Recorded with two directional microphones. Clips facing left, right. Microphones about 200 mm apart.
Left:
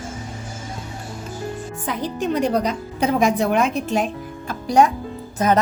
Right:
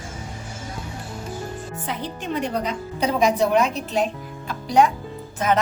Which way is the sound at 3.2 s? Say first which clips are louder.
Right 1 dB; 50° left (ahead or behind).